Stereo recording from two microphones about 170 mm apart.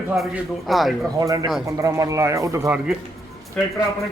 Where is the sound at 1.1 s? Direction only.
20° right (ahead or behind).